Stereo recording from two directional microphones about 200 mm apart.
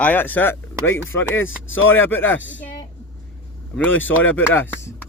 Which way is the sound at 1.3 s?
80° left.